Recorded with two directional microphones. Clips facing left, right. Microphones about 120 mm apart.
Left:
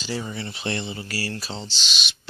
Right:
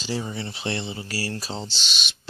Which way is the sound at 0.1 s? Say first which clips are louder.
Right 1 dB; 20° right (ahead or behind).